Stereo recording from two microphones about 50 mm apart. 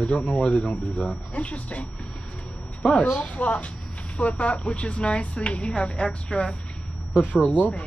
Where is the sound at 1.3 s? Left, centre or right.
Left.